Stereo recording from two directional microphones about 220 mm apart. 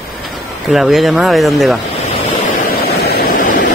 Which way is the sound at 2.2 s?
45° left (ahead or behind).